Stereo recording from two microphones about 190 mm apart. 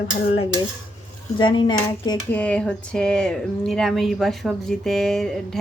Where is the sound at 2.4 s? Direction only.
5° left (ahead or behind).